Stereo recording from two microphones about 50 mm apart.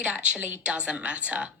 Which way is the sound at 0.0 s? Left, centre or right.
Right.